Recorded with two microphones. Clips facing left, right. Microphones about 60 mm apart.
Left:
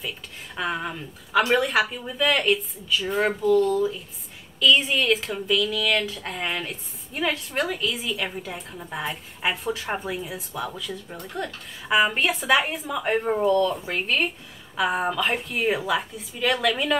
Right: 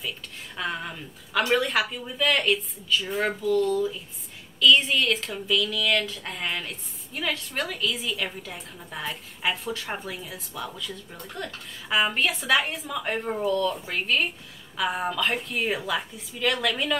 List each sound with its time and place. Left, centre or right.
0.6 s a woman's voice: centre
12.9 s speech: centre
13.5 s a woman's voice: centre